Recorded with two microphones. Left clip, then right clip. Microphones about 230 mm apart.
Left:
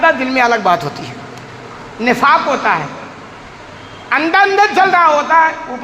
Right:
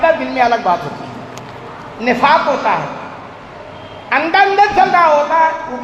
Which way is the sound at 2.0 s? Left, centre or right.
Left.